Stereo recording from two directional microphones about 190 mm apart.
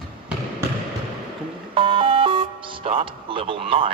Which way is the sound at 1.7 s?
25° right (ahead or behind).